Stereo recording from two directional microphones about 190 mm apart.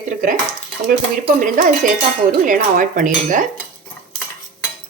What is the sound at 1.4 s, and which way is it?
Speech, 45° right (ahead or behind).